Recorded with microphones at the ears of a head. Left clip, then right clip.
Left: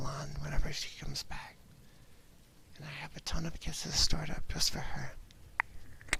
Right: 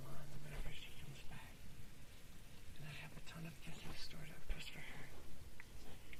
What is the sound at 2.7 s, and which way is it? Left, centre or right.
Speech, left.